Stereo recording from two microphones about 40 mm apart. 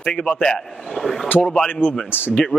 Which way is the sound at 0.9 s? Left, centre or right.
Centre.